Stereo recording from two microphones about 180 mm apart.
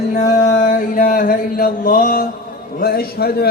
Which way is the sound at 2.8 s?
60° left (ahead or behind).